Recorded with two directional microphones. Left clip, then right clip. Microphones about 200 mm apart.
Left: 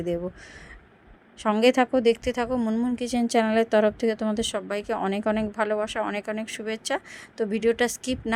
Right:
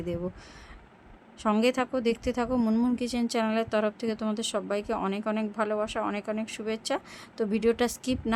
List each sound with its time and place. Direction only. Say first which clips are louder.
1.4 s a woman's voice: left 5 dB; 15° left (ahead or behind)
2.6 s a woman's voice: left 1 dB; 5° left (ahead or behind)